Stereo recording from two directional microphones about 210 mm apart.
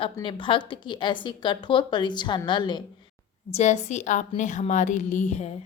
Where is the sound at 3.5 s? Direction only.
35° left (ahead or behind).